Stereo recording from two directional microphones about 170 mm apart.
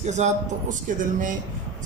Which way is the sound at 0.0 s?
45° right (ahead or behind).